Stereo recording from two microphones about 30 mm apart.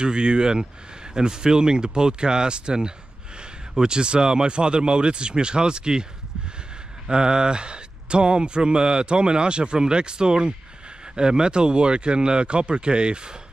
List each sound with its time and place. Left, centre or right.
0.0 s speech: right
7.1 s speech: right